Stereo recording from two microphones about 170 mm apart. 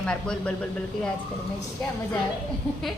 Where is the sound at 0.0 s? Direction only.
5° left (ahead or behind).